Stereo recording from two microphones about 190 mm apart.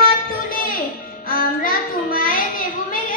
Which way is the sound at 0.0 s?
50° left (ahead or behind).